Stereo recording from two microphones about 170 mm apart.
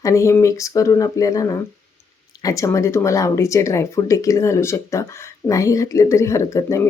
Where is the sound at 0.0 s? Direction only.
20° left (ahead or behind).